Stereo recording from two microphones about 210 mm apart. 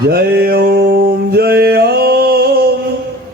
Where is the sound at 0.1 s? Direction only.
45° right (ahead or behind).